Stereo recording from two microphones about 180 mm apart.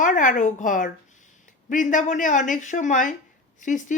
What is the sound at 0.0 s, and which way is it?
A woman's voice, 45° left (ahead or behind).